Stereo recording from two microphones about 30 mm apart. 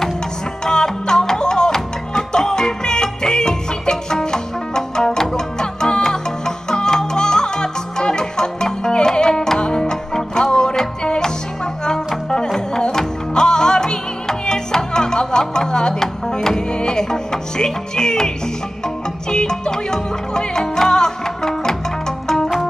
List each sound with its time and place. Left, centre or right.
0.7 s music: left
12.5 s music: left
19.3 s music: left